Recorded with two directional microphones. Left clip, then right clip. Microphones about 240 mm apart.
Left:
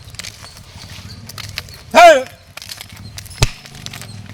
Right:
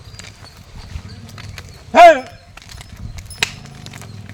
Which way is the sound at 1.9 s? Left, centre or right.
Left.